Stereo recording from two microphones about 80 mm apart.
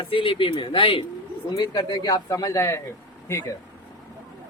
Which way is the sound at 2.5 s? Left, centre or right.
Left.